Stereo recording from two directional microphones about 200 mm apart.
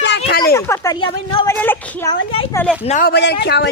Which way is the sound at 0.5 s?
15° left (ahead or behind).